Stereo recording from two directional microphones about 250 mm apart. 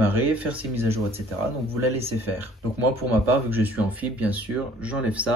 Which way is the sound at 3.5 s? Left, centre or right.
Centre.